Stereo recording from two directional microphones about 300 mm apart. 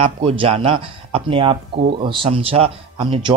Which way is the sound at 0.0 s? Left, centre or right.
Centre.